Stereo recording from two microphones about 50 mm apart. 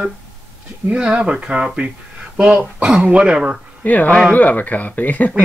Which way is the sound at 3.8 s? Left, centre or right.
Left.